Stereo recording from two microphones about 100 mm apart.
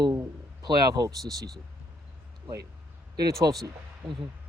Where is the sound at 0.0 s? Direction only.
35° right (ahead or behind).